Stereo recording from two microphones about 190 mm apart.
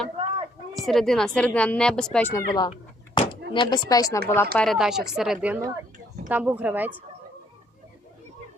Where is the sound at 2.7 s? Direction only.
30° left (ahead or behind).